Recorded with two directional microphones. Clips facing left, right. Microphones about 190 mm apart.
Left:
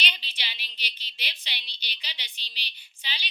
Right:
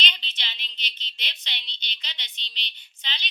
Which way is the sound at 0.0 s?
10° left (ahead or behind).